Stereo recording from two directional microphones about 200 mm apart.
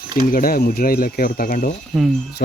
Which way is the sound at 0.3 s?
45° left (ahead or behind).